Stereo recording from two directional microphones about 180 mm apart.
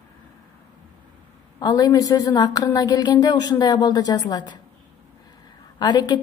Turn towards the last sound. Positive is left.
turn(degrees=25)  # may be behind; listen again after turning